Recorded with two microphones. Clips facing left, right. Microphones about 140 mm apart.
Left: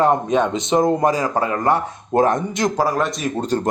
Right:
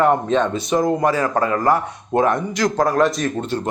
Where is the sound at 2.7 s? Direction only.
5° left (ahead or behind).